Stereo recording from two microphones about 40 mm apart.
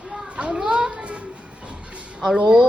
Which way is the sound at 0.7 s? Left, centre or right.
Right.